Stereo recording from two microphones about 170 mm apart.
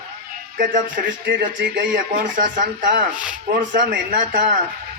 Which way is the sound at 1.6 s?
90° right.